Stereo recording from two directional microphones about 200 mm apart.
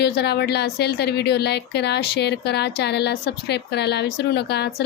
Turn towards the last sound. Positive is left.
turn(degrees=55)  # may be behind; listen again after turning